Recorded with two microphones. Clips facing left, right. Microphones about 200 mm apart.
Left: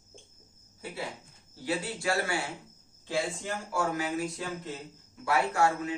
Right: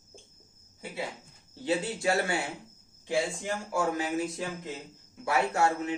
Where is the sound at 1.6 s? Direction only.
25° right (ahead or behind).